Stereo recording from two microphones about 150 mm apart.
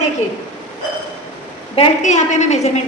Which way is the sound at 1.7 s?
50° left (ahead or behind).